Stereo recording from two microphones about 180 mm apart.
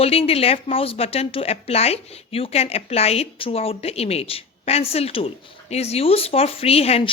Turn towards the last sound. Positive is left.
turn(degrees=35)  # may be behind; listen again after turning